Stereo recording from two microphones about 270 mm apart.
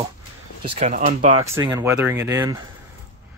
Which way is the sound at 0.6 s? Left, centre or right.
Right.